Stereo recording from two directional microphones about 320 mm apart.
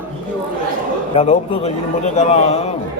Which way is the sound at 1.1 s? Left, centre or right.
Centre.